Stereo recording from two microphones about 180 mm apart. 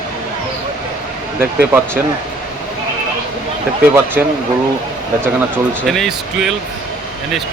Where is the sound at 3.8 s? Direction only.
10° right (ahead or behind).